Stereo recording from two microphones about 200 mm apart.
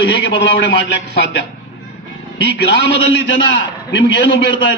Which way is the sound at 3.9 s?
60° left (ahead or behind).